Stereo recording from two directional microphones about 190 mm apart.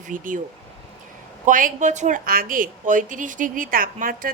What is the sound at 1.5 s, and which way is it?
A woman's voice, 45° right (ahead or behind).